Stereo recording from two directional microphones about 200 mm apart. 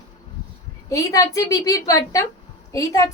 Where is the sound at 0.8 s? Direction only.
15° left (ahead or behind).